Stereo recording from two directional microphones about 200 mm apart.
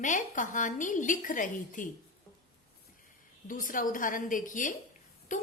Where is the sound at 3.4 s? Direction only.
40° left (ahead or behind).